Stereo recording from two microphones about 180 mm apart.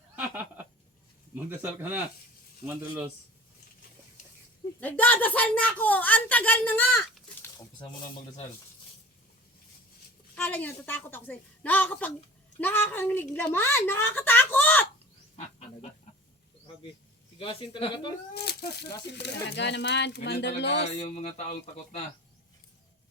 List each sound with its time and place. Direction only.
0.2 s a sound: 10° right (ahead or behind)
1.5 s speech: 10° right (ahead or behind)
4.8 s a woman's voice: 10° left (ahead or behind); by 8.4 s 25° left (ahead or behind)
10.3 s a woman's voice: 10° left (ahead or behind)
17.4 s speech: 30° left (ahead or behind)
18.3 s speech: 65° left (ahead or behind)
20.9 s a sound: 40° left (ahead or behind)